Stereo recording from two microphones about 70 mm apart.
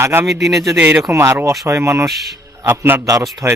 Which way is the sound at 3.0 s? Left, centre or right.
Right.